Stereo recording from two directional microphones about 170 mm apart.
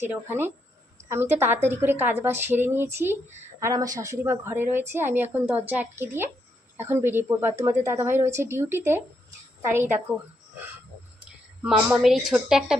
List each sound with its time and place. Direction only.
0.1 s a woman's voice: 10° right (ahead or behind)
11.6 s speech: 5° right (ahead or behind)